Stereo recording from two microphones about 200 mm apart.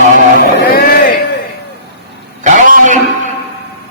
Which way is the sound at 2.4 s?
40° right (ahead or behind).